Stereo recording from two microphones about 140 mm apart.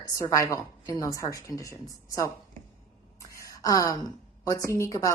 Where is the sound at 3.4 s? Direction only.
25° left (ahead or behind).